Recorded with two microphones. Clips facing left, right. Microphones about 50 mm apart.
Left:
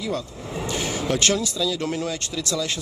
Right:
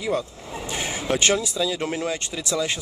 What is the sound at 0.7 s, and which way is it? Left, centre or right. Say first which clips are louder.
Speech: even; right.